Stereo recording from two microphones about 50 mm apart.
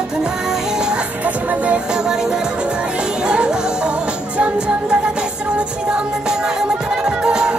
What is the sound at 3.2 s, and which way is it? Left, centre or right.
Music, centre.